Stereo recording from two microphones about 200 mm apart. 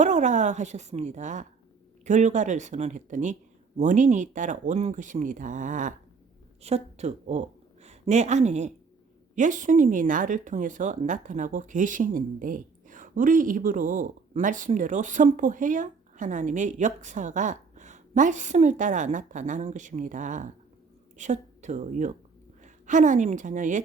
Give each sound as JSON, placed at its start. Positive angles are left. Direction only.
{"t": 0.0, "sound": "a woman's voice", "side_deg": -35}